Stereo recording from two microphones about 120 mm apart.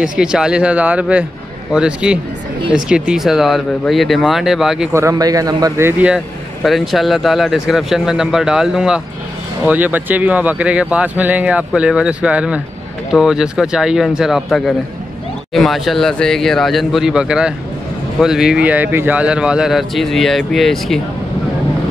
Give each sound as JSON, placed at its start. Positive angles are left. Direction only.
{"t": 0.0, "sound": "a man's voice", "side_deg": -5}
{"t": 5.1, "sound": "a man's voice", "side_deg": -30}
{"t": 5.9, "sound": "speech", "side_deg": -10}
{"t": 6.6, "sound": "a man's voice", "side_deg": 0}